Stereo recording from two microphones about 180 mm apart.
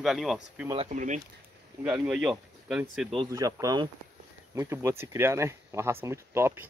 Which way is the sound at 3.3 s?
20° right (ahead or behind).